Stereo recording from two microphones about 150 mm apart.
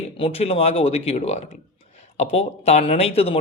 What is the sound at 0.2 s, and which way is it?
A man's voice, 40° left (ahead or behind).